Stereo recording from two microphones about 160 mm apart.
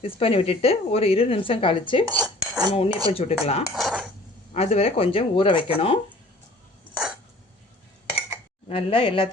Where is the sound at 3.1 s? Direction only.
40° left (ahead or behind).